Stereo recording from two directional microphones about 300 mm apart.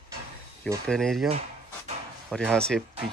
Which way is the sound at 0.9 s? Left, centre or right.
Centre.